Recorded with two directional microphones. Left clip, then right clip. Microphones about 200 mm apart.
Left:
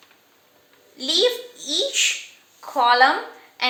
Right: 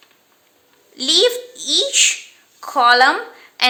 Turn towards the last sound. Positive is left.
turn(degrees=-40)  # may be behind; listen again after turning